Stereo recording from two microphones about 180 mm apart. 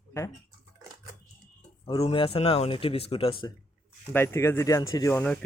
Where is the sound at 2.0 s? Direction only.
30° left (ahead or behind).